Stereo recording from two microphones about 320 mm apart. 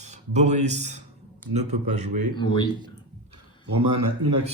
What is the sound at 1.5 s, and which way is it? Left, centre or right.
Speech, right.